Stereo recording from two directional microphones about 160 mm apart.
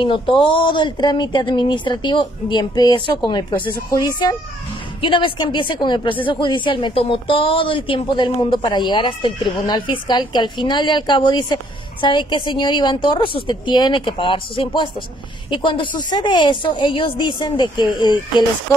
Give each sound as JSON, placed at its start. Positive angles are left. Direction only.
{"t": 0.0, "sound": "speech", "side_deg": 30}
{"t": 5.0, "sound": "speech", "side_deg": 30}